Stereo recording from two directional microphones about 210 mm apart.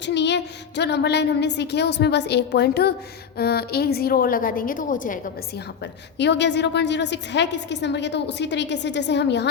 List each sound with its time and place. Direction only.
0.0 s speech: 55° left (ahead or behind); by 5.2 s 40° left (ahead or behind)
6.1 s a woman's voice: 55° left (ahead or behind)